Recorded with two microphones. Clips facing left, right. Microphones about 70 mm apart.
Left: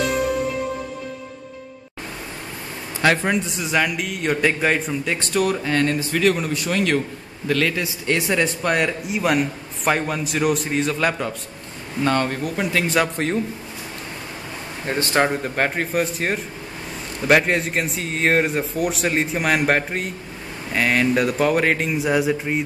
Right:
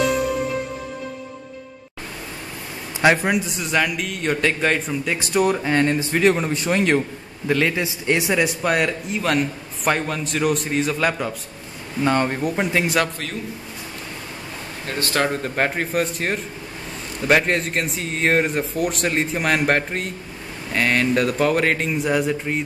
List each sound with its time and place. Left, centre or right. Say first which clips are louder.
3.0 s a man's voice: right 2 dB; centre
5.3 s a man's voice: right 2 dB; centre
12.0 s a man's voice: right 1 dB; centre
14.9 s speech: left 2 dB; left
15.4 s a man's voice: even; centre